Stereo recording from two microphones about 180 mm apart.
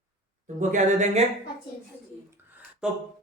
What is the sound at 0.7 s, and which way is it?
Speech, 40° right (ahead or behind).